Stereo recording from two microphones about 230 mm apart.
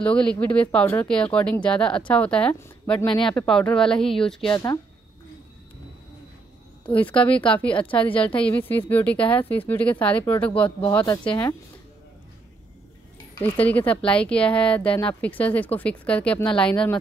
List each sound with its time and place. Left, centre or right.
0.0 s speech: centre
4.5 s speech: centre
7.2 s speech: centre
13.3 s speech: centre